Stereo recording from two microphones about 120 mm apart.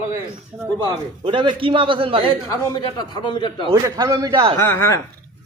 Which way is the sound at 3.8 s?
35° right (ahead or behind).